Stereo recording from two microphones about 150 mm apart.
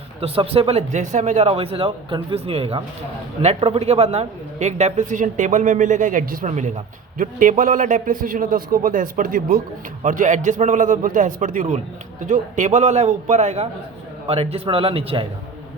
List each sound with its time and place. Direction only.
0.2 s speech: 40° right (ahead or behind); by 9.6 s 70° right (ahead or behind)
10.0 s a man's voice: 55° right (ahead or behind); by 15.3 s 40° right (ahead or behind)